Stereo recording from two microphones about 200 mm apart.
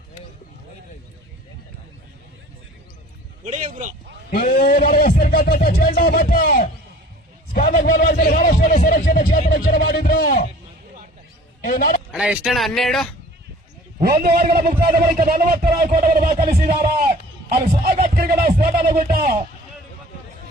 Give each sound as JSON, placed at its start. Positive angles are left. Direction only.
{"t": 3.4, "sound": "speech", "side_deg": -35}
{"t": 4.3, "sound": "a man's voice", "side_deg": 50}
{"t": 11.6, "sound": "speech", "side_deg": 50}
{"t": 12.1, "sound": "speech", "side_deg": -5}
{"t": 14.0, "sound": "a man's voice", "side_deg": -50}